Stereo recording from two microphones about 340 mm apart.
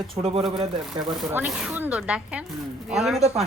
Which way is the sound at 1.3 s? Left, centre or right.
Centre.